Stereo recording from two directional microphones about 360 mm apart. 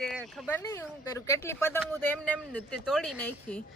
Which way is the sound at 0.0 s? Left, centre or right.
Centre.